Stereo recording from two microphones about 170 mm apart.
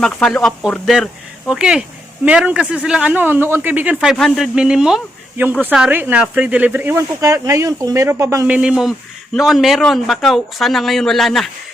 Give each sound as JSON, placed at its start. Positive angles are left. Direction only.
{"t": 0.0, "sound": "speech", "side_deg": 5}
{"t": 8.5, "sound": "speech", "side_deg": -5}